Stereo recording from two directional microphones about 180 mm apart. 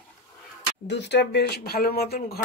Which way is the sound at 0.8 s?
75° left (ahead or behind).